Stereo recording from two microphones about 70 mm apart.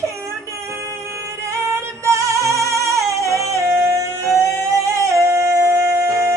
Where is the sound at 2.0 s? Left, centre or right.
Right.